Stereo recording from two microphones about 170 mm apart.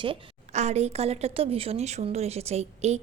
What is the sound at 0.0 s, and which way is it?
A woman's voice, 35° right (ahead or behind).